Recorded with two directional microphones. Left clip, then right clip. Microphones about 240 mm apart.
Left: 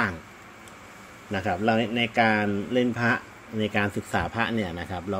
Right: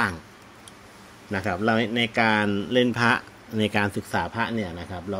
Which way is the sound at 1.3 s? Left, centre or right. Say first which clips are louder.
Right 1 dB; centre.